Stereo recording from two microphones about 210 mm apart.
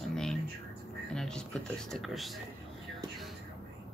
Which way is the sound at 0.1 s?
5° left (ahead or behind).